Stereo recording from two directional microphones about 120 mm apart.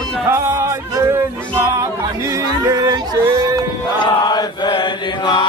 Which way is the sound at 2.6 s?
30° right (ahead or behind).